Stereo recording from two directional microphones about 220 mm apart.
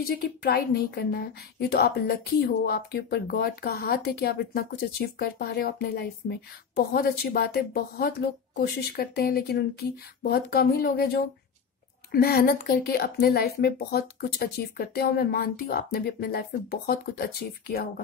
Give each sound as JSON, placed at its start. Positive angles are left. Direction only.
{"t": 0.0, "sound": "a woman's voice", "side_deg": 45}